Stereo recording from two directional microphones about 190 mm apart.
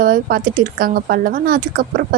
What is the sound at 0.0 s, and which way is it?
Speech, 50° right (ahead or behind).